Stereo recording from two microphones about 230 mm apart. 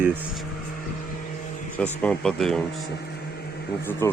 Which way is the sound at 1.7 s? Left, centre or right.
Centre.